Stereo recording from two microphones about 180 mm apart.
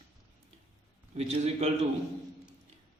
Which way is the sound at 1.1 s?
35° right (ahead or behind).